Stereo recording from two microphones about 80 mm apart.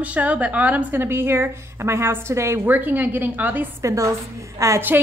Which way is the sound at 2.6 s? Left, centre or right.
Right.